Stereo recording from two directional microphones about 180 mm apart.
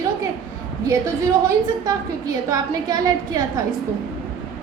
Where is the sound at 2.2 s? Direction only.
20° right (ahead or behind).